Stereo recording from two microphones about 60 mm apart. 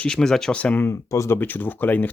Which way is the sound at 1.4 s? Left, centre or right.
Left.